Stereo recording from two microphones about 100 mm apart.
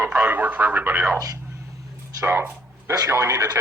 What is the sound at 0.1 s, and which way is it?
Radio, 15° right (ahead or behind).